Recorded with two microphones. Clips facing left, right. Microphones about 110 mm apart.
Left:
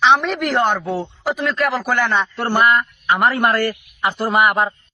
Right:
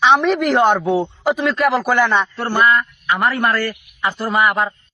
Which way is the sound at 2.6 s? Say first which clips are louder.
Right 1 dB; 25° left (ahead or behind).